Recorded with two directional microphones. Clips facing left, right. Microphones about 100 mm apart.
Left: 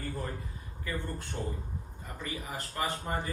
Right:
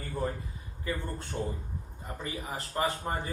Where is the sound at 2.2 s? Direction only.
30° right (ahead or behind).